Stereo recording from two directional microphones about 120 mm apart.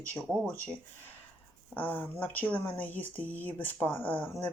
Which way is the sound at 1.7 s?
15° left (ahead or behind).